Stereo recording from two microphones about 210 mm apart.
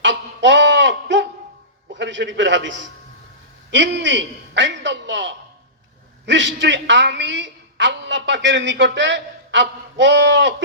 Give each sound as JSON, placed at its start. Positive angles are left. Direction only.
{"t": 0.0, "sound": "goat", "side_deg": -60}
{"t": 1.9, "sound": "a man's voice", "side_deg": -60}